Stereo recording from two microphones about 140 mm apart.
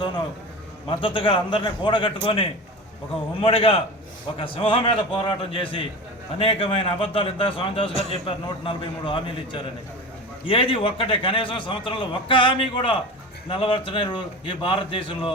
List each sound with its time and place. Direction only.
0.9 s a man's voice: 40° left (ahead or behind)